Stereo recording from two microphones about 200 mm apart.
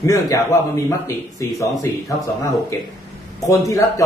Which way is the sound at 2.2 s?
15° left (ahead or behind).